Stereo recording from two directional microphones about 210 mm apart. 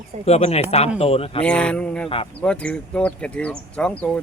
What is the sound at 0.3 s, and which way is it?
Speech, 30° left (ahead or behind).